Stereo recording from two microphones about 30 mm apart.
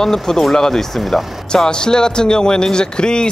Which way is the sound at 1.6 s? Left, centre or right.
Left.